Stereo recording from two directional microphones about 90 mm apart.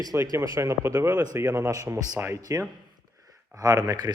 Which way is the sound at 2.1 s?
25° right (ahead or behind).